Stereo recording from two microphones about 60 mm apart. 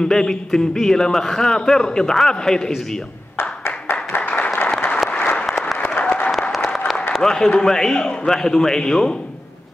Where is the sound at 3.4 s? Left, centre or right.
Left.